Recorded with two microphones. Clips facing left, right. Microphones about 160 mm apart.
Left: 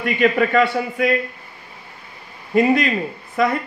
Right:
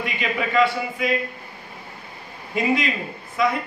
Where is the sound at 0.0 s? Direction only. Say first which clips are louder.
Left 9 dB; 55° left (ahead or behind).